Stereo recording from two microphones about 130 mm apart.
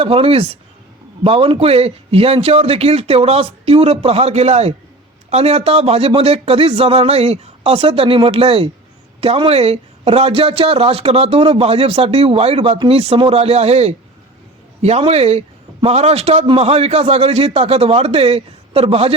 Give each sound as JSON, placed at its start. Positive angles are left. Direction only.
{"t": 0.0, "sound": "a man's voice", "side_deg": -50}